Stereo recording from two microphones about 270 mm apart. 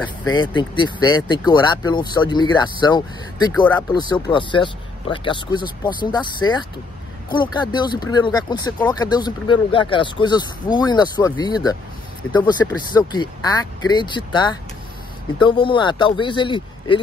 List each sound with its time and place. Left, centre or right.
0.0 s speech: centre